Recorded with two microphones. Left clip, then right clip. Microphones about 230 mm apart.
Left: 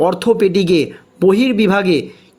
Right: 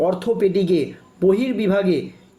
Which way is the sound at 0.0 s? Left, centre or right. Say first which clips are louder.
Left 5 dB; left.